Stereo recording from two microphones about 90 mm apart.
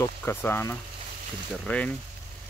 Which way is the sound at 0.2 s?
25° left (ahead or behind).